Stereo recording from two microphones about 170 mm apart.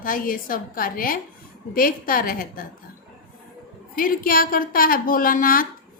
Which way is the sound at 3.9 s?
55° left (ahead or behind).